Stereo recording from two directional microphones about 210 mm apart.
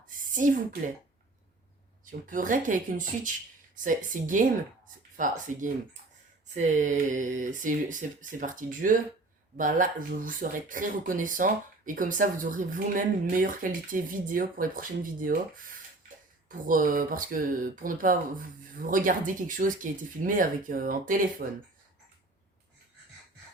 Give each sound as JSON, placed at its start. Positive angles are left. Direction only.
{"t": 0.3, "sound": "speech", "side_deg": -40}
{"t": 2.0, "sound": "speech", "side_deg": -40}
{"t": 3.8, "sound": "speech", "side_deg": -40}
{"t": 16.5, "sound": "speech", "side_deg": -40}